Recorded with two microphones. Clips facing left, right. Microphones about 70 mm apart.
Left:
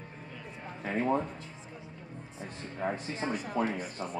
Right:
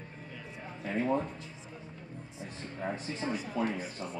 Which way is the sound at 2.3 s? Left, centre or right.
Left.